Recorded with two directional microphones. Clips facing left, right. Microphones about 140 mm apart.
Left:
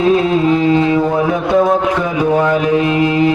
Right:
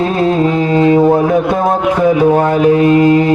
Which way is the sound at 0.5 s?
40° right (ahead or behind).